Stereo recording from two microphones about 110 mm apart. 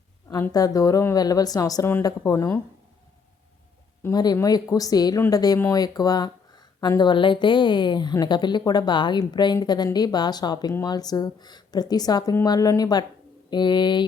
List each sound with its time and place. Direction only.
0.5 s speech: 35° left (ahead or behind)
4.1 s speech: 35° left (ahead or behind)